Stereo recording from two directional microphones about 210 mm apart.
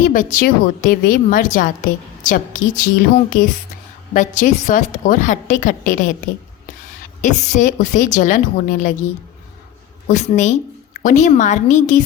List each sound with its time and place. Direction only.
0.0 s a woman's voice: 40° left (ahead or behind)
7.2 s a woman's voice: 35° left (ahead or behind)
10.1 s a woman's voice: 35° left (ahead or behind)